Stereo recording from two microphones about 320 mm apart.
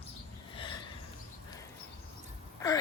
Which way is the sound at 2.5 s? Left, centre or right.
Centre.